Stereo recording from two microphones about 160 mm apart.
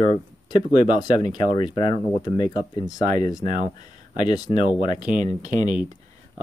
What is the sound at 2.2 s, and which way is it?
Speech, 25° left (ahead or behind).